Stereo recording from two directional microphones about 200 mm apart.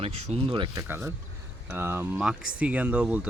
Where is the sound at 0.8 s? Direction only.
10° right (ahead or behind).